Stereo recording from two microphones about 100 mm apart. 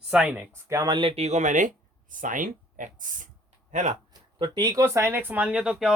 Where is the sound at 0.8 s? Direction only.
50° right (ahead or behind).